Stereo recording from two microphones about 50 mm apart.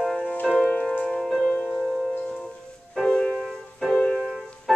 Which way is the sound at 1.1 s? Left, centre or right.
Centre.